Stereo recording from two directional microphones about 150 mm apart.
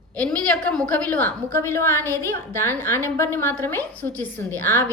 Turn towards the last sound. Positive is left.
turn(degrees=15)  # may be behind; listen again after turning